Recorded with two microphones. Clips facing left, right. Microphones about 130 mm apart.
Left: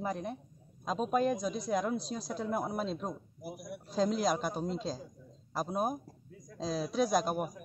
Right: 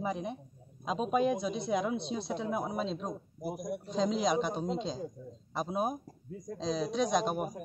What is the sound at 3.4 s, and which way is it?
Speech, 40° right (ahead or behind).